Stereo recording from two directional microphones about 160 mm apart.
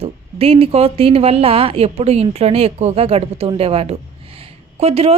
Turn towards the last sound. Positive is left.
turn(degrees=-40)  # may be behind; listen again after turning